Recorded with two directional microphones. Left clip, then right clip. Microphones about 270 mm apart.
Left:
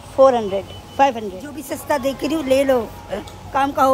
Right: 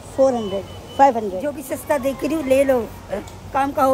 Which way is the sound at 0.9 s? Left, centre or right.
Centre.